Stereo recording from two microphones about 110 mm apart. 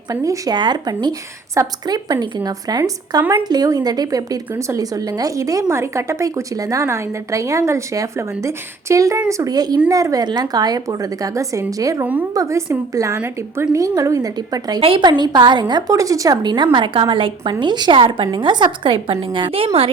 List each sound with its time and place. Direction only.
0.1 s a woman's voice: 30° right (ahead or behind)
13.1 s a woman's voice: 20° right (ahead or behind)
13.7 s a woman's voice: 30° right (ahead or behind)
14.8 s a woman's voice: 55° right (ahead or behind)
15.0 s a woman's voice: 40° right (ahead or behind); by 19.9 s 60° right (ahead or behind)